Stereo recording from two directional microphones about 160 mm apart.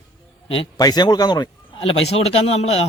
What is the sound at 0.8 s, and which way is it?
A man's voice, 25° left (ahead or behind).